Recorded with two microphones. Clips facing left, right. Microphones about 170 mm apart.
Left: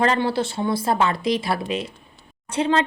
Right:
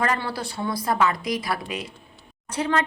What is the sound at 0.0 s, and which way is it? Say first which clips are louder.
A woman's voice: left 6 dB; 25° left (ahead or behind).